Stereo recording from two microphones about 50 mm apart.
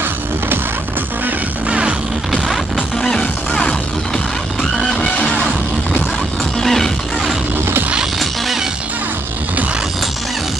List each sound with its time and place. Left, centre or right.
1.7 s music: right
2.3 s music: centre
4.7 s music: centre
6.6 s music: centre